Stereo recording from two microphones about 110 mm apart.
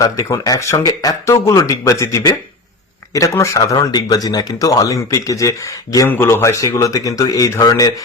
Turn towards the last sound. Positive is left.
turn(degrees=35)  # may be behind; listen again after turning